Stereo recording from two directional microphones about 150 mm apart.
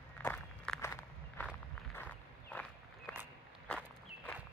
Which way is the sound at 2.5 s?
10° left (ahead or behind).